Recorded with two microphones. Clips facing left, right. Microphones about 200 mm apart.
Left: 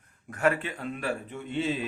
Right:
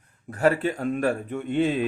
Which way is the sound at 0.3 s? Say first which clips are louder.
Right 5 dB; 35° right (ahead or behind).